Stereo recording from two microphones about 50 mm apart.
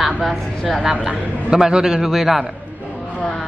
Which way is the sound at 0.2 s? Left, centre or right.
Centre.